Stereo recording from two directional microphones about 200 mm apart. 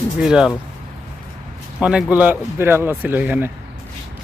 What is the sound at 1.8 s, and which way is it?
Speech, 5° right (ahead or behind).